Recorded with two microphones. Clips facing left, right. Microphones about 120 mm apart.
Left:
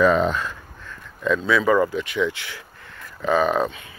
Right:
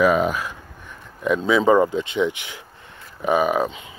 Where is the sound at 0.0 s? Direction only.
10° right (ahead or behind).